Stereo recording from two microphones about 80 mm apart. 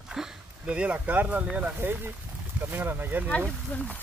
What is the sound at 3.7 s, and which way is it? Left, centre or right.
Speech, centre.